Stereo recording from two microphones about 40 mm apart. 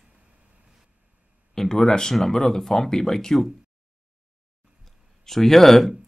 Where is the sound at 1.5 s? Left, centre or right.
Centre.